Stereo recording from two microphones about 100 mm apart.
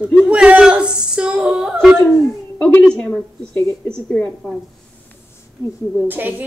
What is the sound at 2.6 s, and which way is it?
A woman's voice, 10° left (ahead or behind).